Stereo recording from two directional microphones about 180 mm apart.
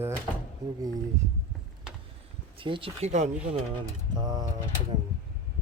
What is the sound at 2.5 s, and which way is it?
Speech, 30° right (ahead or behind).